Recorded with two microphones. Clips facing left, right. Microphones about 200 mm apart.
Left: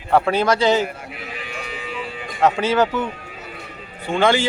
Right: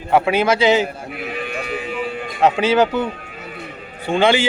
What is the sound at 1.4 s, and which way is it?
Music, 55° right (ahead or behind).